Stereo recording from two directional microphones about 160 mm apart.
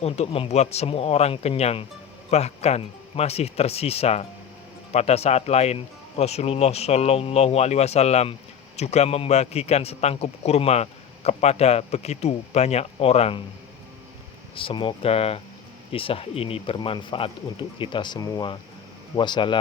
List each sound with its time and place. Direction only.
0.0 s speech: 40° left (ahead or behind)
14.5 s speech: 35° left (ahead or behind)